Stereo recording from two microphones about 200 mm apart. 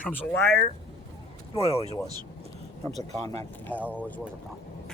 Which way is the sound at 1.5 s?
30° left (ahead or behind).